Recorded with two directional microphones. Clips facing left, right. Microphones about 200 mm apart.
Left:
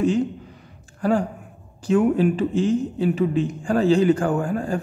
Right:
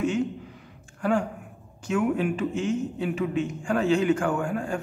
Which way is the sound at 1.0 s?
35° left (ahead or behind).